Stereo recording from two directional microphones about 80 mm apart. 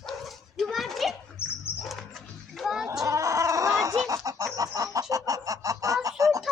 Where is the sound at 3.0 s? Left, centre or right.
Right.